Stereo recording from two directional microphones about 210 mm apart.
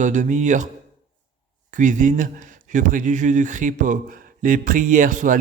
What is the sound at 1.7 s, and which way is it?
Speech, 35° right (ahead or behind).